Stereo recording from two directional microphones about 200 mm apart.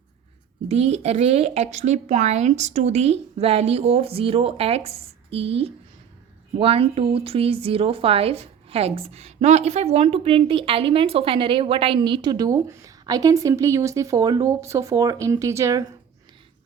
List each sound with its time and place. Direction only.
0.7 s a woman's voice: 30° right (ahead or behind); by 15.8 s 15° right (ahead or behind)